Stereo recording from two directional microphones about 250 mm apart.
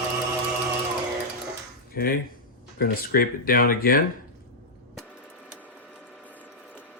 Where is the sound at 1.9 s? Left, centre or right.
Left.